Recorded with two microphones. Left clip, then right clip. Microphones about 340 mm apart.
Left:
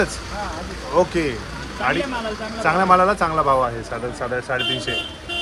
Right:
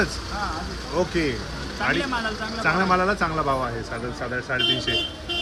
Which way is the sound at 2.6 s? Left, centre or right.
Centre.